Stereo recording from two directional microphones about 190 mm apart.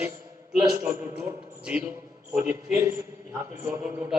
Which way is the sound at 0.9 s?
10° right (ahead or behind).